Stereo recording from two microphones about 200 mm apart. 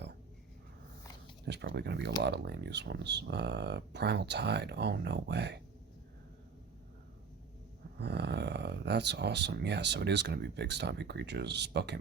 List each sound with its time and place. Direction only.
1.5 s speech: 55° right (ahead or behind)
7.9 s speech: 55° right (ahead or behind)